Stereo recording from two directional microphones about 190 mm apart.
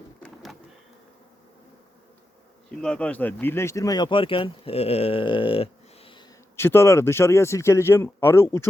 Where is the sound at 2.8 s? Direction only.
5° left (ahead or behind); by 6.2 s 30° left (ahead or behind).